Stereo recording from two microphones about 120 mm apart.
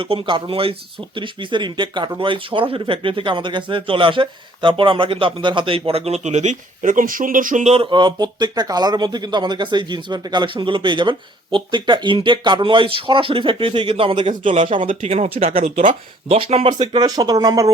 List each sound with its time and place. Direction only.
0.0 s speech: 45° right (ahead or behind); by 7.8 s 80° right
7.8 s speech: 40° right (ahead or behind)
14.8 s speech: 60° right (ahead or behind)
16.7 s speech: 35° right (ahead or behind)